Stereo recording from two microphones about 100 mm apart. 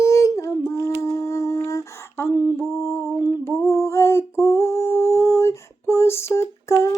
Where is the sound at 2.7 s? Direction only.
25° left (ahead or behind).